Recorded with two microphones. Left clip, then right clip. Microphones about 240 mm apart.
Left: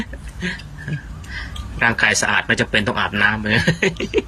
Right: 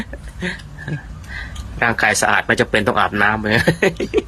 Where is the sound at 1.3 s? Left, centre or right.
Right.